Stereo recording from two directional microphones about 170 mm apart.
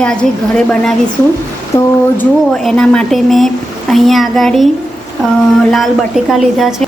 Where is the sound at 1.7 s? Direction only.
15° left (ahead or behind).